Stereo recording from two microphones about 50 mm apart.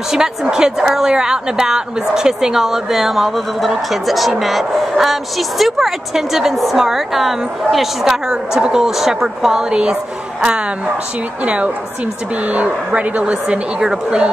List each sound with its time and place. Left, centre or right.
0.1 s a woman's voice: centre
11.4 s a woman's voice: right